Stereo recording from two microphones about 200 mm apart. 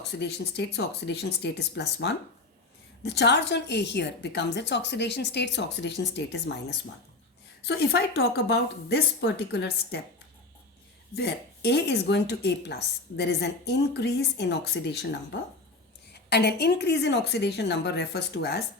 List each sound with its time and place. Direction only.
0.0 s a woman's voice: 55° left (ahead or behind)
7.7 s a woman's voice: 55° left (ahead or behind)
11.1 s a woman's voice: 55° left (ahead or behind)